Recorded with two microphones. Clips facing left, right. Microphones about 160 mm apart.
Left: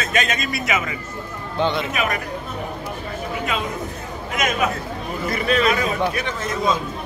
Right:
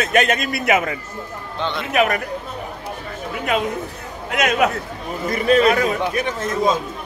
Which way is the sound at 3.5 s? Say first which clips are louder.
Right 7 dB; 60° right (ahead or behind).